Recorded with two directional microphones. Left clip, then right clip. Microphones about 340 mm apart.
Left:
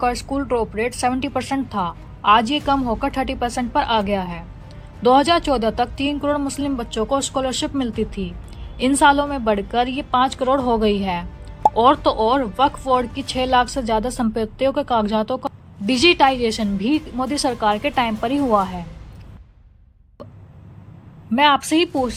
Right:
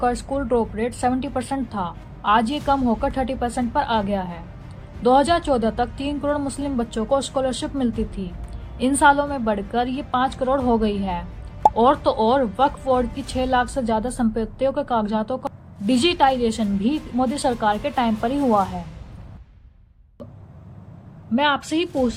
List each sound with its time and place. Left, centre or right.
0.3 s speech: centre
6.2 s a woman's voice: left
6.6 s speech: centre
18.4 s a woman's voice: left
21.3 s speech: centre